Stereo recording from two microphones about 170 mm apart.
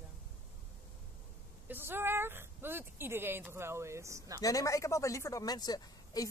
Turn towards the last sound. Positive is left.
turn(degrees=25)  # may be behind; listen again after turning